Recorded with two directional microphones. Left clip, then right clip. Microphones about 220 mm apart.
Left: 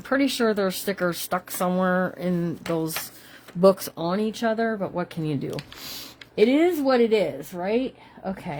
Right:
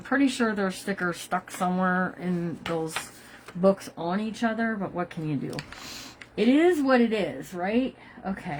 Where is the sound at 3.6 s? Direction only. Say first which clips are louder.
Left 5 dB; 50° left (ahead or behind).